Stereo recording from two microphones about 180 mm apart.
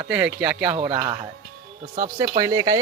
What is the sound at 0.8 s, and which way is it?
Speech, 25° right (ahead or behind).